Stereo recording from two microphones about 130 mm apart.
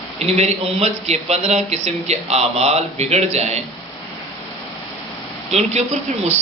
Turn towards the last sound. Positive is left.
turn(degrees=-60)  # may be behind; listen again after turning